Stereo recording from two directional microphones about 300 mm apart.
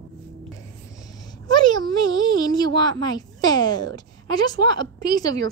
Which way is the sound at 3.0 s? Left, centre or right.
Centre.